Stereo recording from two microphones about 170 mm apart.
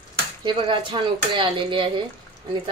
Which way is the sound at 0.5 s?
30° right (ahead or behind).